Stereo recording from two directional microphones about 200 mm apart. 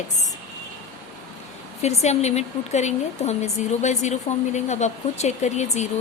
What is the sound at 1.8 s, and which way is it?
A woman's voice, 35° left (ahead or behind).